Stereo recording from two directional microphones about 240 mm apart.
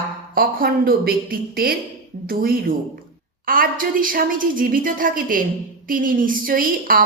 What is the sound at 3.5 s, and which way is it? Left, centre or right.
A woman's voice, right.